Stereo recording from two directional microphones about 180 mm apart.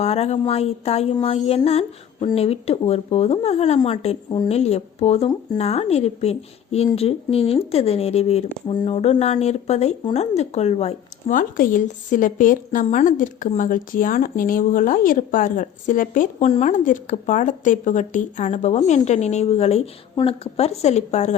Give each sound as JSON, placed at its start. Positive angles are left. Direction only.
{"t": 0.0, "sound": "speech", "side_deg": 35}